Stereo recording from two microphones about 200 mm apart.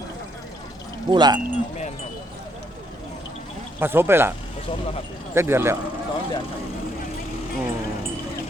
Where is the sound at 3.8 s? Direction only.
10° right (ahead or behind).